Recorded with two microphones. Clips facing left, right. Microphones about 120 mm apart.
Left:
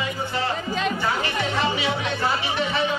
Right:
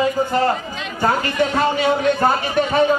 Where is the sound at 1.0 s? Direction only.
45° right (ahead or behind).